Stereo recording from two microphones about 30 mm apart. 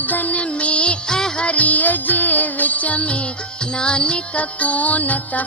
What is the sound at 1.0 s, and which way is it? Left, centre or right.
Music, centre.